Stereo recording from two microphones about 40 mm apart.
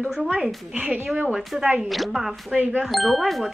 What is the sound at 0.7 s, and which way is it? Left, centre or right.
Speech, right.